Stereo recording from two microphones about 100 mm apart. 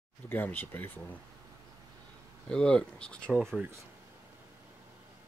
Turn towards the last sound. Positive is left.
turn(degrees=-5)  # may be behind; listen again after turning